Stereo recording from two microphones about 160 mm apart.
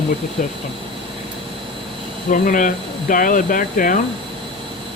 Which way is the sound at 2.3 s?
60° left (ahead or behind).